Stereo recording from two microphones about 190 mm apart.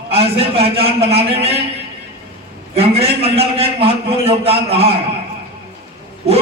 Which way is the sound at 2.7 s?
30° right (ahead or behind).